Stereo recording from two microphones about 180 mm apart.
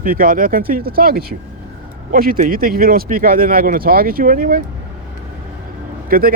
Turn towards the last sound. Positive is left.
turn(degrees=-55)  # may be behind; listen again after turning